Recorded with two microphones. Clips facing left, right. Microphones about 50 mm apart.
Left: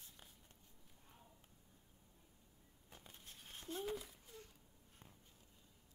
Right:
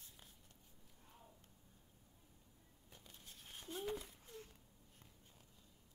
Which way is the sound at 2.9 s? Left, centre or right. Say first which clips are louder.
Left 2 dB; left.